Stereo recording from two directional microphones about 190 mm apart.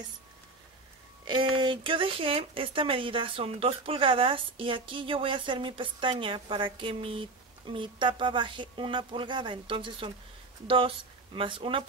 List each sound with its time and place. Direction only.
1.2 s speech: 25° right (ahead or behind)